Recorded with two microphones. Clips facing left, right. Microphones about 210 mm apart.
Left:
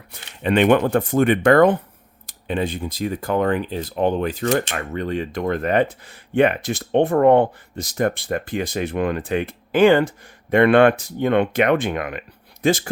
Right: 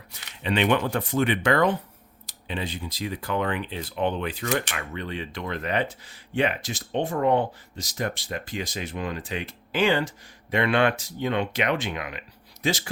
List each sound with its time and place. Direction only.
0.1 s speech: 50° left (ahead or behind)